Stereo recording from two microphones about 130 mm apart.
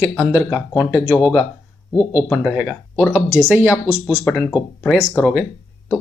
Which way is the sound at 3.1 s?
15° right (ahead or behind).